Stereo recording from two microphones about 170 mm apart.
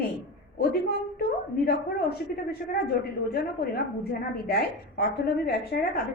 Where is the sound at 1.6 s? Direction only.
65° left (ahead or behind).